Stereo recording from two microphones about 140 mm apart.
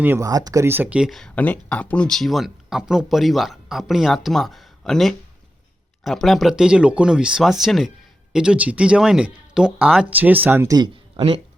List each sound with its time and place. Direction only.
0.0 s speech: 20° right (ahead or behind)
11.2 s speech: 40° right (ahead or behind)